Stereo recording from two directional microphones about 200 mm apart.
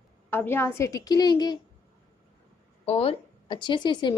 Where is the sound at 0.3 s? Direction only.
10° left (ahead or behind).